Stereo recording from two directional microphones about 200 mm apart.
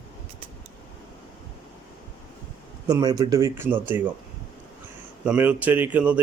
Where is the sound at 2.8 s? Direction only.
15° right (ahead or behind).